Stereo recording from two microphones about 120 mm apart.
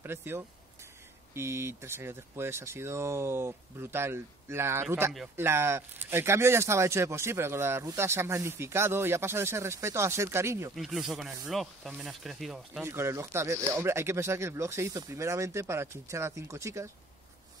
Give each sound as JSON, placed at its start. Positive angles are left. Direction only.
{"t": 0.0, "sound": "speech", "side_deg": -20}
{"t": 10.8, "sound": "speech", "side_deg": -5}
{"t": 12.8, "sound": "speech", "side_deg": -20}